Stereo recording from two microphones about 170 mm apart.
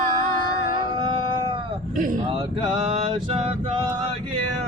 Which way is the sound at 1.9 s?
50° right (ahead or behind).